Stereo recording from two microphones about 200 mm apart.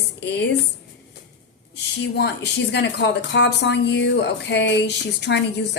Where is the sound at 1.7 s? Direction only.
60° left (ahead or behind).